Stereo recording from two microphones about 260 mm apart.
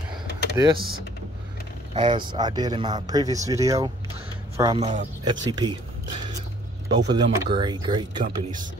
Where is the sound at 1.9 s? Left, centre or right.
Centre.